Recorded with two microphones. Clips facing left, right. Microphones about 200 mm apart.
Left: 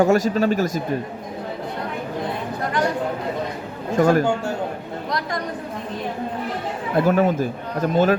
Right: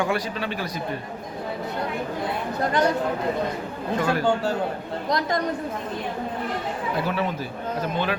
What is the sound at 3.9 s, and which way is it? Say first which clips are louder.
Speech: left 7 dB; 45° left (ahead or behind).